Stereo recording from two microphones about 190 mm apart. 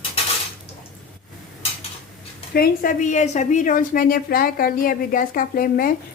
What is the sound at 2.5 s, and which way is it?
A woman's voice, 50° left (ahead or behind).